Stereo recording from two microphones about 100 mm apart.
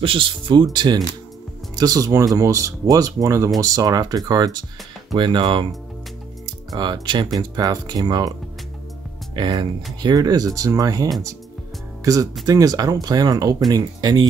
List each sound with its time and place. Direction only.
0.0 s speech: 60° right (ahead or behind)
6.7 s speech: 50° right (ahead or behind)
9.3 s speech: 50° right (ahead or behind)
10.0 s speech: 40° right (ahead or behind)